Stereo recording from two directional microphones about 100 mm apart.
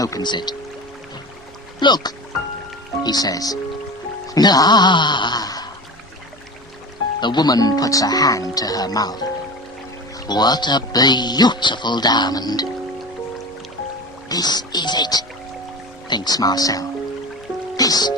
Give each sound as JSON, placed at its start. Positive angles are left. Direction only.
{"t": 0.0, "sound": "speech", "side_deg": 40}
{"t": 1.8, "sound": "speech", "side_deg": 45}
{"t": 7.2, "sound": "speech", "side_deg": 45}
{"t": 14.3, "sound": "speech", "side_deg": 40}